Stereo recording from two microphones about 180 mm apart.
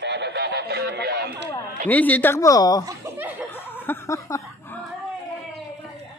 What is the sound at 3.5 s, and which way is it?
Chuckle, 10° left (ahead or behind).